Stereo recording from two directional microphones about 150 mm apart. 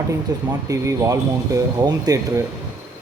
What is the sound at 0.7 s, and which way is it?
Speech, 20° right (ahead or behind).